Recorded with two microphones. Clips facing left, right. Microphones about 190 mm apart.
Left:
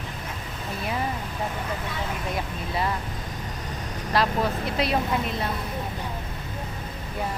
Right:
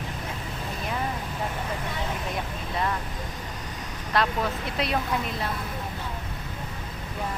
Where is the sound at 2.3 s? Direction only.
5° left (ahead or behind).